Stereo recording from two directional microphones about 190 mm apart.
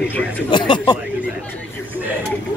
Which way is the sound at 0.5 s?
25° left (ahead or behind).